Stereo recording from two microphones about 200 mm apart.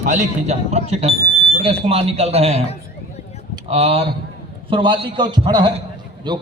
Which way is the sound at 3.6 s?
30° right (ahead or behind).